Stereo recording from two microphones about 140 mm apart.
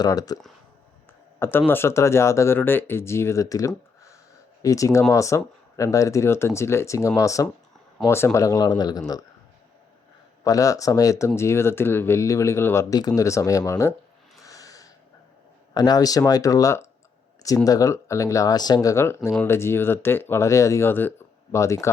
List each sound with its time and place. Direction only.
0.0 s speech: 25° left (ahead or behind)
1.4 s speech: 15° left (ahead or behind)
10.4 s speech: 25° left (ahead or behind)
14.4 s snort: 25° left (ahead or behind)
15.7 s speech: 30° left (ahead or behind)